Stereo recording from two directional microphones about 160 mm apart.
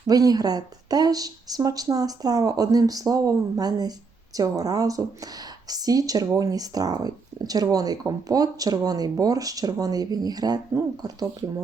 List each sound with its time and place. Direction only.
0.1 s a woman's voice: 25° right (ahead or behind)